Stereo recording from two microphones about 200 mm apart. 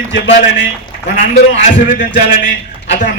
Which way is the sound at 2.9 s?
40° left (ahead or behind).